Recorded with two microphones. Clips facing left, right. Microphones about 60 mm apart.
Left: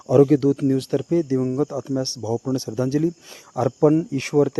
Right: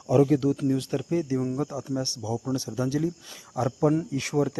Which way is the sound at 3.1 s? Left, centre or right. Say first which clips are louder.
Left 6 dB; left.